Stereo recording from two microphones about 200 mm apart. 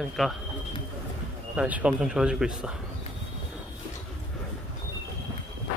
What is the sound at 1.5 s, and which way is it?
Speech, 5° right (ahead or behind).